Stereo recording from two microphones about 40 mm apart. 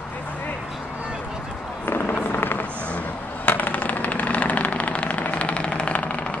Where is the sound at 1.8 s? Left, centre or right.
Left.